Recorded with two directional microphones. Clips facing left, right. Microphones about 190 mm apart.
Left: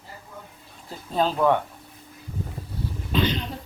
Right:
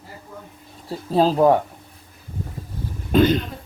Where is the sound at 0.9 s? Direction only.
35° right (ahead or behind).